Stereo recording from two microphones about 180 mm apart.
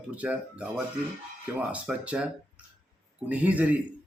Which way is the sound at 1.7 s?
5° right (ahead or behind).